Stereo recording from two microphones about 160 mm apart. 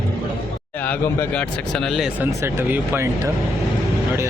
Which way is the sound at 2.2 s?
15° right (ahead or behind).